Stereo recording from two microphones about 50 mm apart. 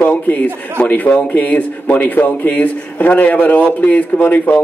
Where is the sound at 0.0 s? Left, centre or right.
Left.